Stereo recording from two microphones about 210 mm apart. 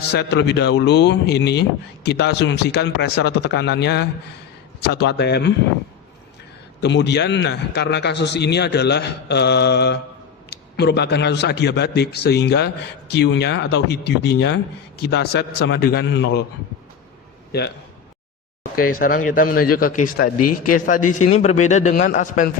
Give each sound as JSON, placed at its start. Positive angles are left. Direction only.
{"t": 0.1, "sound": "speech", "side_deg": 55}
{"t": 6.8, "sound": "speech", "side_deg": 55}
{"t": 18.8, "sound": "speech", "side_deg": 45}